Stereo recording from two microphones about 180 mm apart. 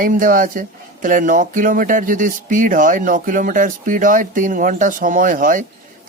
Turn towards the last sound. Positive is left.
turn(degrees=-50)  # may be behind; listen again after turning